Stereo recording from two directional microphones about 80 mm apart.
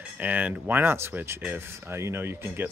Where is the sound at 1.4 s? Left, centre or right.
Right.